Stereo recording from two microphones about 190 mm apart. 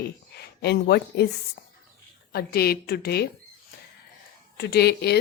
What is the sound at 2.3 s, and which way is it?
A woman's voice, 55° left (ahead or behind).